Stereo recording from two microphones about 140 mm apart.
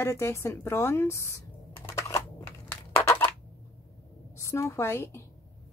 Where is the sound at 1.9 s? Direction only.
20° left (ahead or behind).